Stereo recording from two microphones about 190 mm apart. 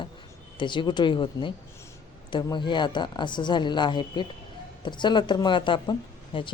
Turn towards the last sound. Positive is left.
turn(degrees=25)  # may be behind; listen again after turning